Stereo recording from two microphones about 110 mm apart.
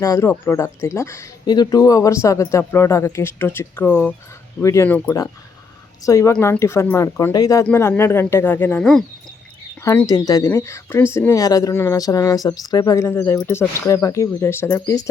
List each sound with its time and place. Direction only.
0.0 s speech: 30° left (ahead or behind)
1.5 s speech: 35° left (ahead or behind); by 8.8 s 20° left (ahead or behind)
8.8 s speech: 5° left (ahead or behind)
9.8 s speech: 30° left (ahead or behind)
13.1 s speech: 20° left (ahead or behind)